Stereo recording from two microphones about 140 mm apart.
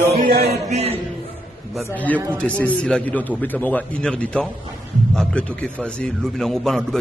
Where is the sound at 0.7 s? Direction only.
50° right (ahead or behind).